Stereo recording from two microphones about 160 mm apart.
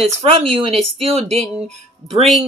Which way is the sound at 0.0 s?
35° right (ahead or behind).